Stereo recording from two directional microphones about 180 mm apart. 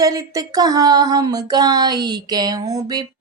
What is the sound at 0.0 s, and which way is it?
Speech, 20° right (ahead or behind).